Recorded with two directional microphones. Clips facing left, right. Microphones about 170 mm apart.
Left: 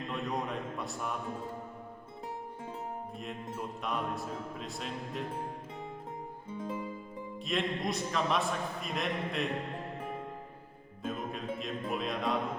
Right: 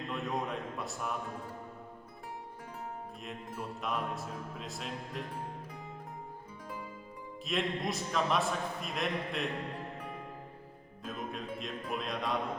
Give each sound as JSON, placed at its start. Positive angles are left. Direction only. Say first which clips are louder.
{"t": 0.1, "sound": "a sound", "louder": "even", "side_deg": 0}
{"t": 3.6, "sound": "a man's voice", "louder": "even", "side_deg": 0}
{"t": 6.5, "sound": "music", "louder": "left 10 dB", "side_deg": 25}
{"t": 7.4, "sound": "a man's voice", "louder": "left 1 dB", "side_deg": 0}
{"t": 11.0, "sound": "a man's voice", "louder": "left 3 dB", "side_deg": 0}